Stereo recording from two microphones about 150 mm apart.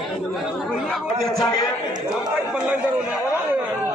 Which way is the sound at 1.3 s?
25° left (ahead or behind).